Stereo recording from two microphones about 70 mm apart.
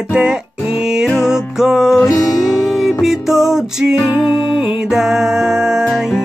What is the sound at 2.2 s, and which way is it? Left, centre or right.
Music, left.